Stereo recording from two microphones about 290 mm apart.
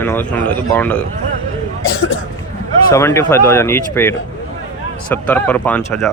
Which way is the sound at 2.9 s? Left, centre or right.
Centre.